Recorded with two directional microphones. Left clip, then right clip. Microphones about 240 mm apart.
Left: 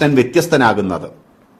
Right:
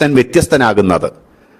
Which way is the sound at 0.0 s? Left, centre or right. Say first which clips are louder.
Right 2 dB; right.